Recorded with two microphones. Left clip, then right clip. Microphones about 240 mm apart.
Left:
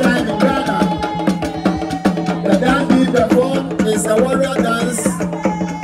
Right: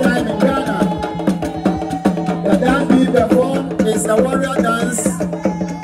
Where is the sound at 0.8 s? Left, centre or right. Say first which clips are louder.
Left 2 dB; left.